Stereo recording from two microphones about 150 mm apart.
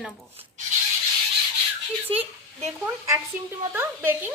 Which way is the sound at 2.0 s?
40° right (ahead or behind).